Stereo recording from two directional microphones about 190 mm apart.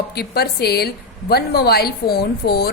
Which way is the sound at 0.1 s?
55° left (ahead or behind).